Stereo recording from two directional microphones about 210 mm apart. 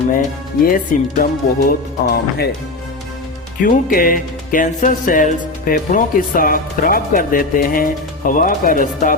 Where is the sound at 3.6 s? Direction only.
40° left (ahead or behind).